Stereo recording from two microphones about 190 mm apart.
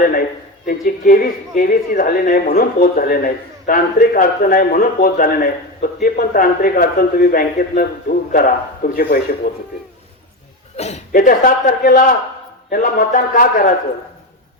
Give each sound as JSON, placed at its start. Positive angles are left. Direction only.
{"t": 0.6, "sound": "speech", "side_deg": 45}
{"t": 10.8, "sound": "speech", "side_deg": 35}